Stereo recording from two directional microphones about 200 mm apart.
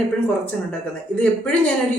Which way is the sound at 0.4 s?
5° left (ahead or behind).